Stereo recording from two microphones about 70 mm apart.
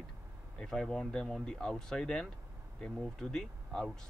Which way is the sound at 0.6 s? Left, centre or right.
Centre.